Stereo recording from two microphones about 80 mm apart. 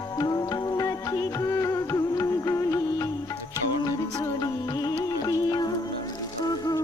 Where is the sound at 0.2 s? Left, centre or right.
Left.